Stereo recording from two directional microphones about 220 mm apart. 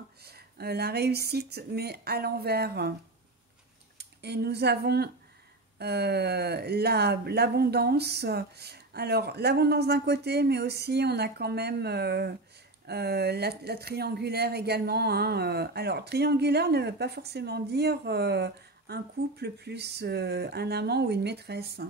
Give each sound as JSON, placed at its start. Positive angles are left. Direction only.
{"t": 0.2, "sound": "speech", "side_deg": -45}
{"t": 4.0, "sound": "speech", "side_deg": -50}